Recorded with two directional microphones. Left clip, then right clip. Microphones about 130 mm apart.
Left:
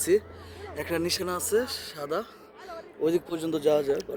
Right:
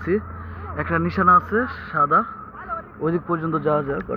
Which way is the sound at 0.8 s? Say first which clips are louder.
Right 7 dB; 25° left (ahead or behind).